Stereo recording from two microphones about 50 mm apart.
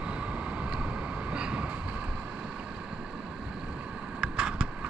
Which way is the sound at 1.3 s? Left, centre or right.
Right.